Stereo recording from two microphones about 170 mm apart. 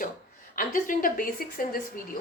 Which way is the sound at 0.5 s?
55° left (ahead or behind).